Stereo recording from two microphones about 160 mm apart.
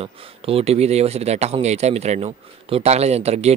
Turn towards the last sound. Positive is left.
turn(degrees=-40)  # may be behind; listen again after turning